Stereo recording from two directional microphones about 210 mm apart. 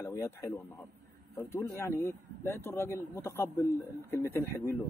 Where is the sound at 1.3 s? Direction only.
15° left (ahead or behind).